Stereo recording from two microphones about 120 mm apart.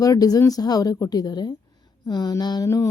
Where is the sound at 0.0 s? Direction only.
30° left (ahead or behind).